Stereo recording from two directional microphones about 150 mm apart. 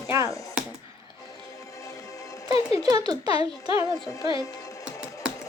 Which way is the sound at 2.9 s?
25° right (ahead or behind).